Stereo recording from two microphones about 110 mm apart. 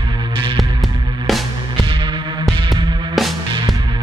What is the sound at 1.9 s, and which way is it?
Music, 45° right (ahead or behind).